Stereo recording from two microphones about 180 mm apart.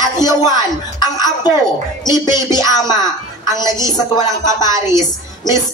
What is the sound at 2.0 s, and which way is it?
Speech, 25° left (ahead or behind).